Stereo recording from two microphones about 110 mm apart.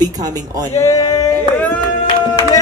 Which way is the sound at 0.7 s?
30° left (ahead or behind).